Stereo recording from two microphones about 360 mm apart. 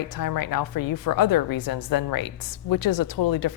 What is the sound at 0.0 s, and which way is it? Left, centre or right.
A woman's voice, left.